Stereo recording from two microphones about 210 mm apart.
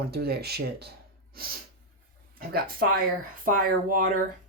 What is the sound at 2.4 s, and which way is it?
Speech, 45° right (ahead or behind).